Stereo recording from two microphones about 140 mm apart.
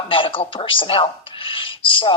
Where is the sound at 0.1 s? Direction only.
40° left (ahead or behind).